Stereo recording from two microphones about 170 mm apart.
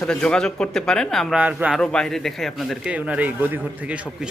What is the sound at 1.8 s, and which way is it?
A man's voice, 5° left (ahead or behind).